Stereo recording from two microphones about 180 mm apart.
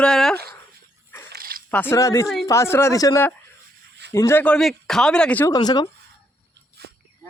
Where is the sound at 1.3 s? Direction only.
55° right (ahead or behind).